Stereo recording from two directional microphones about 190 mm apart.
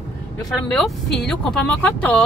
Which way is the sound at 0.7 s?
5° left (ahead or behind).